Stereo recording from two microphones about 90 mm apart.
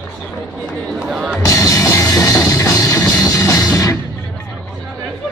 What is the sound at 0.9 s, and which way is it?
Music, 10° right (ahead or behind).